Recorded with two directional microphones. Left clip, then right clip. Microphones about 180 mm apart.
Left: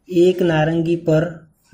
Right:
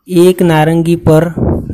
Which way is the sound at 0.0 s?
40° right (ahead or behind).